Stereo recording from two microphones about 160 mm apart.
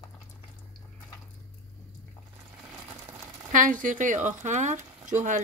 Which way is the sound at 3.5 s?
55° right (ahead or behind).